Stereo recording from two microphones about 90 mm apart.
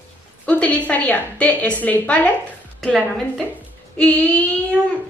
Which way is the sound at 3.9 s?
15° left (ahead or behind).